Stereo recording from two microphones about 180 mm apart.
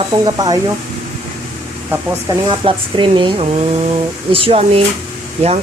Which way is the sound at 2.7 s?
30° right (ahead or behind).